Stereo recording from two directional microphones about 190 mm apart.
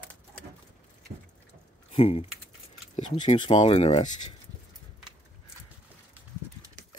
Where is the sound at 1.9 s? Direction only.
30° left (ahead or behind).